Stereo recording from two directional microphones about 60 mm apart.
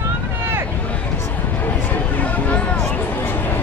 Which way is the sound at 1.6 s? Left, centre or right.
Left.